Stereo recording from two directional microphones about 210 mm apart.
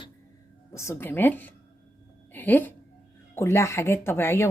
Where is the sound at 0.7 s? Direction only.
15° left (ahead or behind).